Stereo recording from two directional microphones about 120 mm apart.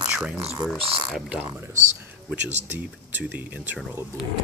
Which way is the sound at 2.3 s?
15° right (ahead or behind).